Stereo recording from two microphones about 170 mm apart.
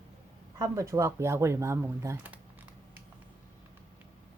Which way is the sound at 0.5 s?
20° right (ahead or behind).